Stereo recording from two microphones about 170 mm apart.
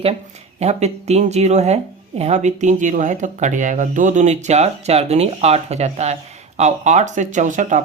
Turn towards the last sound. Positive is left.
turn(degrees=-45)  # may be behind; listen again after turning